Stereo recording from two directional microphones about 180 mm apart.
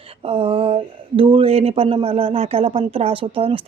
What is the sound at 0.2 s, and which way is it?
Speech, 30° right (ahead or behind).